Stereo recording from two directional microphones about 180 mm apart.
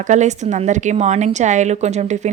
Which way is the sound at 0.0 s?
40° right (ahead or behind).